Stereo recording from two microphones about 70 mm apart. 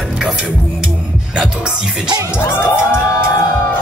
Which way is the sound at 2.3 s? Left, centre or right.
Left.